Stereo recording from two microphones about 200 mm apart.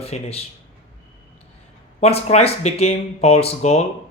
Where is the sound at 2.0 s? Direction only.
30° left (ahead or behind).